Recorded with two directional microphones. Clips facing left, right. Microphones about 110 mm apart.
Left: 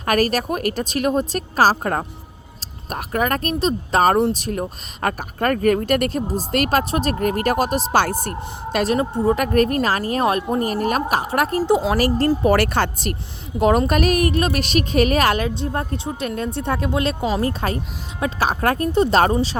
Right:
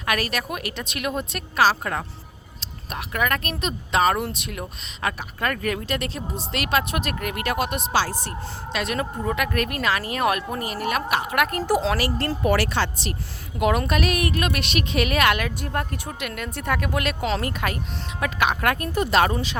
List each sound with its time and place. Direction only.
0.0 s a woman's voice: 40° left (ahead or behind)
7.9 s speech: 50° left (ahead or behind)
8.7 s a woman's voice: 35° left (ahead or behind)
10.6 s a woman's voice: 45° left (ahead or behind)
12.5 s speech: 50° left (ahead or behind)
13.6 s a woman's voice: 35° left (ahead or behind)